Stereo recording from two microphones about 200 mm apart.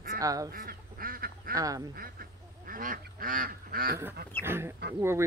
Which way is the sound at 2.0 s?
45° right (ahead or behind).